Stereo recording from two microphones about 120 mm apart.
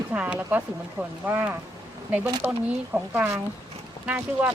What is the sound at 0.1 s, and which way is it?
Speech, 10° right (ahead or behind).